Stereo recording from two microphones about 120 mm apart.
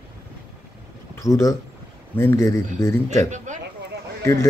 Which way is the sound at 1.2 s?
25° left (ahead or behind).